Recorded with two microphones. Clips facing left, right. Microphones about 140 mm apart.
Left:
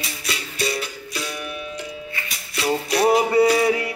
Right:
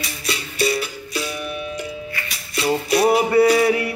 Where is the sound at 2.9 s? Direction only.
10° right (ahead or behind).